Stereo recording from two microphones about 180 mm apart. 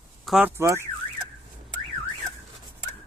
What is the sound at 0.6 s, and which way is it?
Car alarm, 15° right (ahead or behind).